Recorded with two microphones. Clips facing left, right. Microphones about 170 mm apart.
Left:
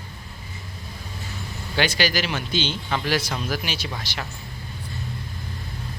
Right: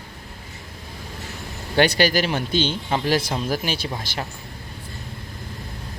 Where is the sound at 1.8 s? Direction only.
55° right (ahead or behind).